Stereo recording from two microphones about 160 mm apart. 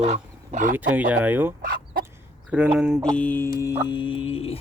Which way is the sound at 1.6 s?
65° right (ahead or behind).